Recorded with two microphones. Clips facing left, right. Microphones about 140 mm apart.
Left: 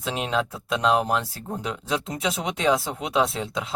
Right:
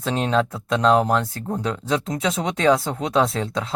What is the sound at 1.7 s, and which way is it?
Speech, 10° left (ahead or behind).